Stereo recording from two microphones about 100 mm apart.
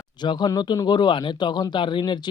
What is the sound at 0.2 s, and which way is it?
Speech, 45° left (ahead or behind).